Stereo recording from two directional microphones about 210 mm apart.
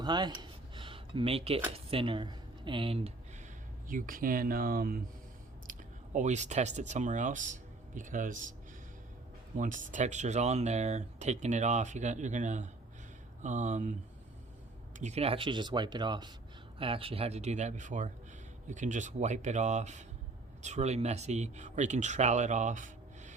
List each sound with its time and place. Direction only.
0.0 s speech: 20° right (ahead or behind)
3.8 s speech: 40° right (ahead or behind)
5.7 s a sound: 40° right (ahead or behind)
6.1 s speech: 35° right (ahead or behind)
9.6 s speech: 40° right (ahead or behind)
14.9 s speech: 30° right (ahead or behind)